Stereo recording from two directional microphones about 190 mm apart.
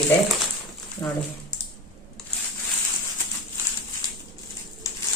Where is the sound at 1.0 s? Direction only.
20° left (ahead or behind).